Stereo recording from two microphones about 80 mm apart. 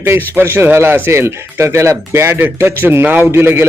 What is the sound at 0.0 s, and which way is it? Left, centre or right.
Speech, right.